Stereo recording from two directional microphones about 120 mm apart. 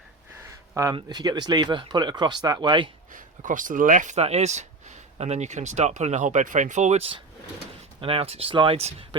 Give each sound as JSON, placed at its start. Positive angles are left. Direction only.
{"t": 0.9, "sound": "speech", "side_deg": -35}
{"t": 3.1, "sound": "speech", "side_deg": -90}